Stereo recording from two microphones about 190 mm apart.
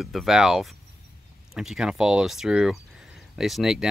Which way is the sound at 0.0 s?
Centre (ahead or behind).